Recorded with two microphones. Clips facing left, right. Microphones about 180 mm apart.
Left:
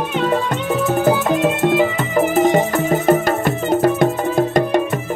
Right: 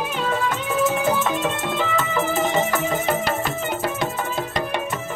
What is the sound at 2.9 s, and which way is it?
Music, 55° left (ahead or behind).